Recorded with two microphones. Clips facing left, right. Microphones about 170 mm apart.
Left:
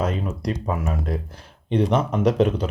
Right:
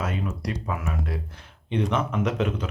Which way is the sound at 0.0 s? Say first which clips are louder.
Left 5 dB; 35° left (ahead or behind).